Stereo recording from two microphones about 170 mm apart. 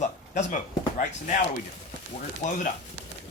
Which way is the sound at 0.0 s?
45° left (ahead or behind).